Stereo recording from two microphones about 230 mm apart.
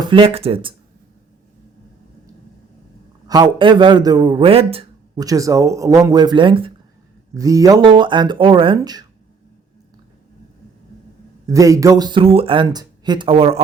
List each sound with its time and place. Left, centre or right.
0.0 s speech: right
3.2 s a man's voice: centre
11.4 s speech: centre